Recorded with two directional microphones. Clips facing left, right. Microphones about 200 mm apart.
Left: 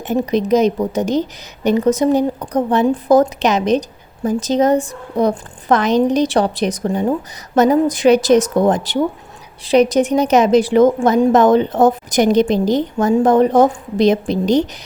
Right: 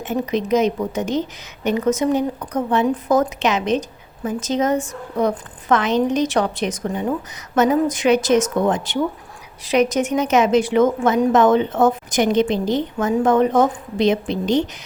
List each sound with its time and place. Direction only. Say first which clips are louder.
0.0 s a woman's voice: left 4 dB; 35° left (ahead or behind)